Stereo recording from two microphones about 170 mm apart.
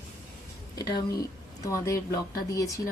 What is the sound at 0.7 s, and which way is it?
Speech, 25° left (ahead or behind).